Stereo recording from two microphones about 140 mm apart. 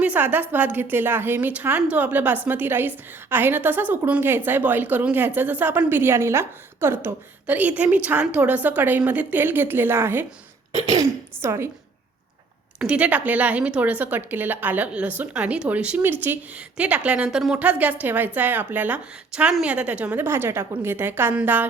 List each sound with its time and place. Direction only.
0.0 s a woman's voice: 10° right (ahead or behind)
12.8 s a woman's voice: 10° right (ahead or behind)